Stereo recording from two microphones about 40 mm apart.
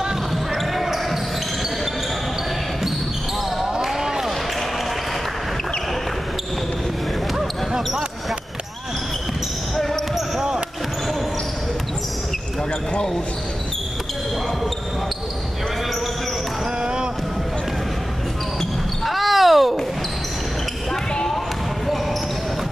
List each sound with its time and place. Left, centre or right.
0.6 s a sound: centre
3.9 s a sound: centre
7.3 s basketball bounce: centre
12.9 s basketball bounce: centre
16.8 s basketball bounce: right
19.0 s basketball bounce: centre